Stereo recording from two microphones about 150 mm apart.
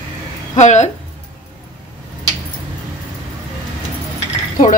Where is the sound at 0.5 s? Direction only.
50° left (ahead or behind).